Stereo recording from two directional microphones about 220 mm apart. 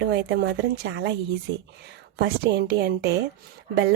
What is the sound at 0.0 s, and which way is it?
A woman's voice, 50° right (ahead or behind).